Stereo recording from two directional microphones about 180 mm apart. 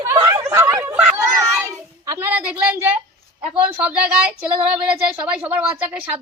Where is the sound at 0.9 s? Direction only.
10° right (ahead or behind).